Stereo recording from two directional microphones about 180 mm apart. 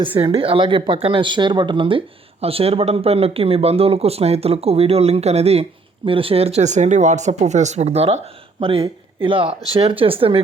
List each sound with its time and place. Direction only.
0.0 s speech: 30° right (ahead or behind)